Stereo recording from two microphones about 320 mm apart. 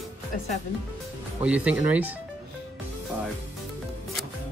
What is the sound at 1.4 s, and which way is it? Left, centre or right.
Speech, centre.